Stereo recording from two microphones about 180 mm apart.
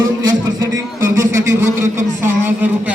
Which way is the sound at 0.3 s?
20° right (ahead or behind).